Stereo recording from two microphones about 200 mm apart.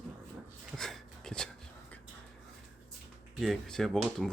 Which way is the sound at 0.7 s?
Centre (ahead or behind).